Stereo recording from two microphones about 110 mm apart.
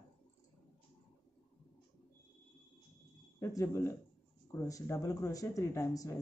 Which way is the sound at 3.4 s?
30° left (ahead or behind).